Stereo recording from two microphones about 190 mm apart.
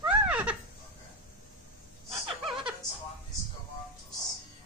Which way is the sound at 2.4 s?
Centre (ahead or behind).